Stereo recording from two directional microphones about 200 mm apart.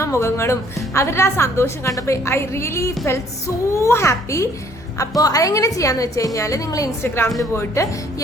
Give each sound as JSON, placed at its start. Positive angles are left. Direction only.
{"t": 0.0, "sound": "a woman's voice", "side_deg": 15}